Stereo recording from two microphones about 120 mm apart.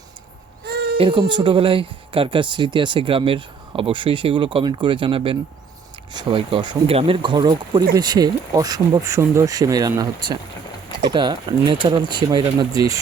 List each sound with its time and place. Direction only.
0.9 s speech: 45° right (ahead or behind); by 13.0 s 30° right (ahead or behind)